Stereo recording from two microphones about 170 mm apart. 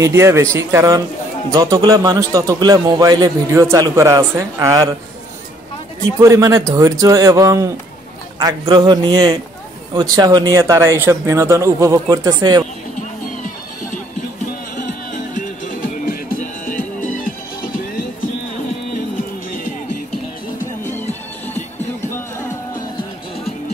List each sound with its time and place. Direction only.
0.0 s a man's voice: 15° right (ahead or behind)
6.1 s a man's voice: 20° right (ahead or behind)
15.3 s music: 50° left (ahead or behind)
19.5 s music: 55° left (ahead or behind)
20.9 s music: 10° left (ahead or behind)